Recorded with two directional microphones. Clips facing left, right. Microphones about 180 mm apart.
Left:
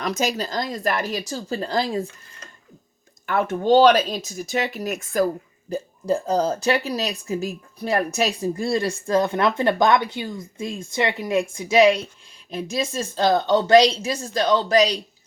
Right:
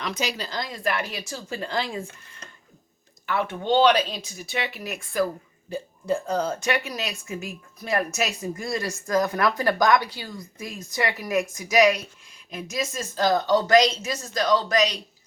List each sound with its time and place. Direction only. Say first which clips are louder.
0.0 s speech: left 5 dB; 45° left (ahead or behind)
3.2 s speech: left 5 dB; 45° left (ahead or behind)